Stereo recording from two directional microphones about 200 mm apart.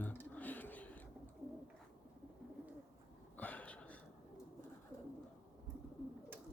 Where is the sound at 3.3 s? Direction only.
5° left (ahead or behind).